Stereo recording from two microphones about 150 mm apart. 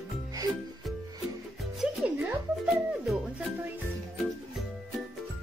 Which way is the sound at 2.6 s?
5° right (ahead or behind).